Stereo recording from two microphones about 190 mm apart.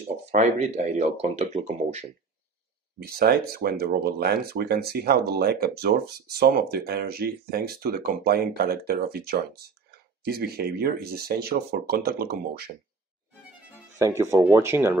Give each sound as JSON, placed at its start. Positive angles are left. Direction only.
{"t": 0.0, "sound": "speech", "side_deg": -35}
{"t": 3.0, "sound": "speech", "side_deg": -55}
{"t": 13.9, "sound": "speech", "side_deg": -15}